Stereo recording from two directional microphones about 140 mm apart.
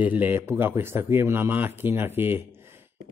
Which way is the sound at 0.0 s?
10° right (ahead or behind).